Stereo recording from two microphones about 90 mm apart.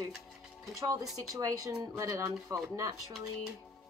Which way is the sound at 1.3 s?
40° right (ahead or behind).